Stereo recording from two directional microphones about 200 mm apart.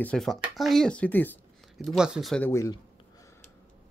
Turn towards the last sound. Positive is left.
turn(degrees=15)  # may be behind; listen again after turning